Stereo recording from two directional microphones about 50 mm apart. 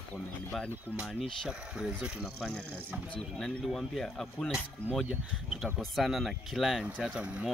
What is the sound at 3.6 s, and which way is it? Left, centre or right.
Speech, centre.